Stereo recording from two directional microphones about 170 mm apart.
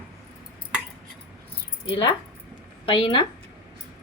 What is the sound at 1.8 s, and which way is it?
A woman's voice, 30° left (ahead or behind).